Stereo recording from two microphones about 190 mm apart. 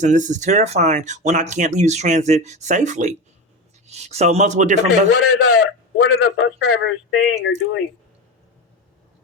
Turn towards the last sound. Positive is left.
turn(degrees=70)  # may be behind; listen again after turning